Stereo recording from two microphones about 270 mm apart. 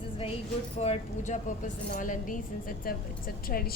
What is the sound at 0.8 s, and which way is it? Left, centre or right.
A woman's voice, left.